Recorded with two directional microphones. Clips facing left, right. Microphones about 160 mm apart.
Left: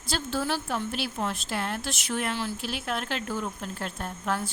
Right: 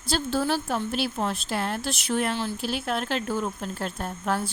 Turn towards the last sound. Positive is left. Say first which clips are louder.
# right 3 dB
turn(degrees=-35)  # may be behind; listen again after turning